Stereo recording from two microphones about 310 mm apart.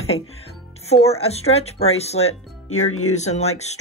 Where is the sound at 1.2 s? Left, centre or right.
Centre.